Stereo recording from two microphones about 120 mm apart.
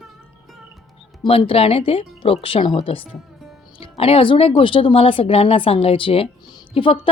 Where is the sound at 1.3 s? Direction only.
50° left (ahead or behind).